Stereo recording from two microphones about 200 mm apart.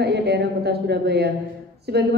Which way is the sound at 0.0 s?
55° right (ahead or behind).